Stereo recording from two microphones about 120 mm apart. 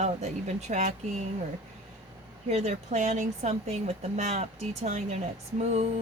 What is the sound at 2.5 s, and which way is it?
Speech, 65° right (ahead or behind).